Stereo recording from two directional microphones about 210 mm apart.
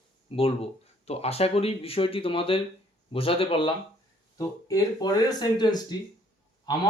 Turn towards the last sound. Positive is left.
turn(degrees=20)  # may be behind; listen again after turning